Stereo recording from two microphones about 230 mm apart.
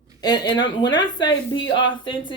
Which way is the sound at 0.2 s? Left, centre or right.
Centre.